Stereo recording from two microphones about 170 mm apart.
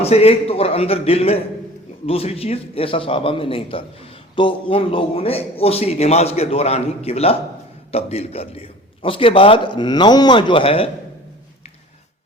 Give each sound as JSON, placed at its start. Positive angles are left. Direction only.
{"t": 0.0, "sound": "a man's voice", "side_deg": 35}